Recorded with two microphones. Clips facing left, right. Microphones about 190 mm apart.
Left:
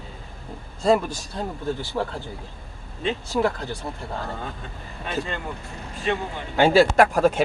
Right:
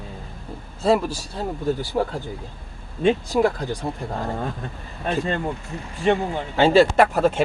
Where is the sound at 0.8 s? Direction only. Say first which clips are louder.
Right 1 dB; 5° right (ahead or behind).